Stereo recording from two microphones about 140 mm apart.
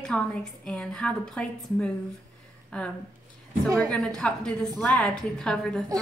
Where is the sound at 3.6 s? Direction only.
25° right (ahead or behind).